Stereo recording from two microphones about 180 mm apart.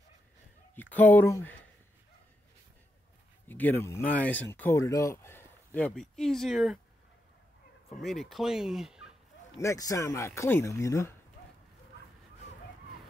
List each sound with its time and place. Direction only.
0.7 s speech: 10° left (ahead or behind)
3.4 s speech: 10° left (ahead or behind)
8.0 s speech: centre (ahead or behind)
9.6 s speech: 15° left (ahead or behind)